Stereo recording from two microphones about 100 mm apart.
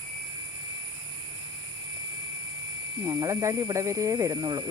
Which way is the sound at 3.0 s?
30° right (ahead or behind).